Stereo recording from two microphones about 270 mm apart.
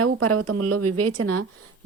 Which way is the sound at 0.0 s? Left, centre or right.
Right.